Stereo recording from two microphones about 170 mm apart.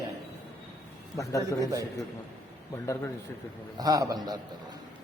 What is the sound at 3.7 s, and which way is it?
Speech, 20° right (ahead or behind).